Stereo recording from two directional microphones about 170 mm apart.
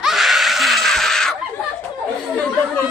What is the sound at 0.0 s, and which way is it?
Screaming, centre (ahead or behind).